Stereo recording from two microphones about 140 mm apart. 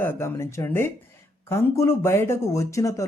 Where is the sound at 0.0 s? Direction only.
15° left (ahead or behind).